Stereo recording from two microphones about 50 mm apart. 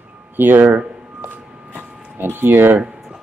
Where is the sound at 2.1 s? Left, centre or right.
Right.